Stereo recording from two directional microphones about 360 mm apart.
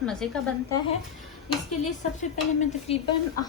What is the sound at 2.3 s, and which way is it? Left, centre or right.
Stir, centre.